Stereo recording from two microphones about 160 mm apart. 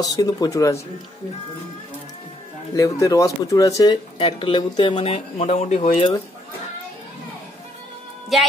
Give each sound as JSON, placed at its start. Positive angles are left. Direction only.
{"t": 0.0, "sound": "speech", "side_deg": 25}
{"t": 2.7, "sound": "speech", "side_deg": 20}
{"t": 8.3, "sound": "a woman's voice", "side_deg": 0}